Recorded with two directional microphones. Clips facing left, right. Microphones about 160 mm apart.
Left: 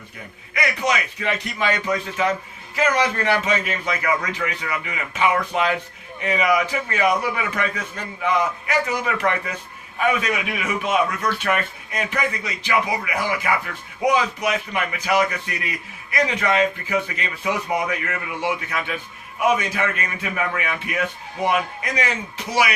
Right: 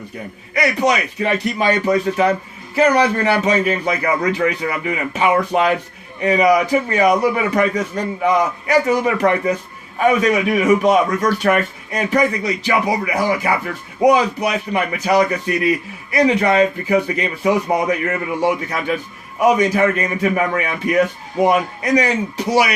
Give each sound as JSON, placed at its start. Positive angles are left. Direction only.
{"t": 0.5, "sound": "a man's voice", "side_deg": -35}